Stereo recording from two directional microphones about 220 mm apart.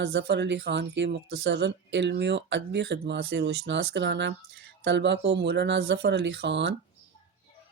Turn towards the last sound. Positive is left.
turn(degrees=-55)  # may be behind; listen again after turning